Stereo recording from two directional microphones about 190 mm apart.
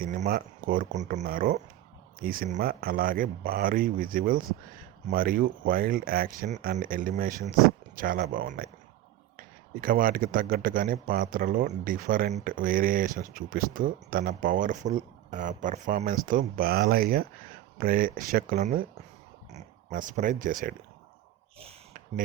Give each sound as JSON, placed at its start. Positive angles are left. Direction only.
{"t": 0.0, "sound": "a man's voice", "side_deg": -45}
{"t": 9.8, "sound": "a man's voice", "side_deg": -50}
{"t": 21.6, "sound": "a sound", "side_deg": -30}